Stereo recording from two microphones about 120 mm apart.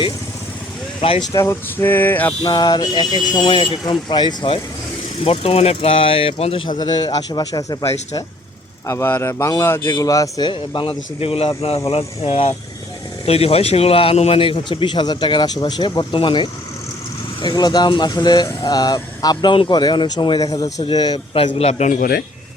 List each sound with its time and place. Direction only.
1.3 s speech: 20° left (ahead or behind)
2.4 s speech: 35° left (ahead or behind)
5.2 s a man's voice: 55° left (ahead or behind)
6.7 s speech: 35° left (ahead or behind)
8.9 s a man's voice: 20° left (ahead or behind)
10.5 s a man's voice: 45° left (ahead or behind)
21.3 s a man's voice: 55° left (ahead or behind); by 22.0 s 80° left